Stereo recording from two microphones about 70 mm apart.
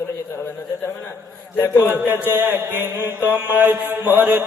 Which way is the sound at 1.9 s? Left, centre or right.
Right.